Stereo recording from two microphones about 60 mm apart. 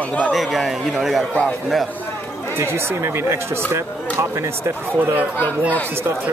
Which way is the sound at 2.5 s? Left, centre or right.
Right.